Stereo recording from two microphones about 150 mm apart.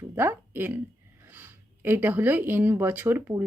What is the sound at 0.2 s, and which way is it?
Speech, 15° right (ahead or behind).